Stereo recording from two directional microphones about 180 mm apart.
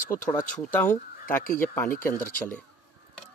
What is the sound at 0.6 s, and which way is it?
Speech, 10° left (ahead or behind).